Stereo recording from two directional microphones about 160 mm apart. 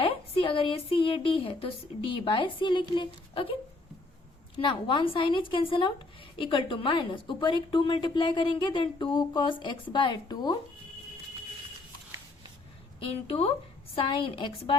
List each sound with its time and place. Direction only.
0.0 s speech: 35° left (ahead or behind)
4.6 s a woman's voice: 30° left (ahead or behind)
13.9 s speech: 35° left (ahead or behind)